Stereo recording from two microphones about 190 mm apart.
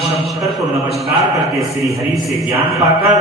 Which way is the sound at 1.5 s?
Centre (ahead or behind).